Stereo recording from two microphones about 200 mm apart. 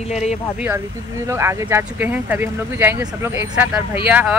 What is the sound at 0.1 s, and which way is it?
Speech, 35° left (ahead or behind).